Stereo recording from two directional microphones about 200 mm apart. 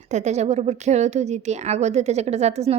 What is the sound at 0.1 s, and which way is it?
A woman's voice, 35° right (ahead or behind).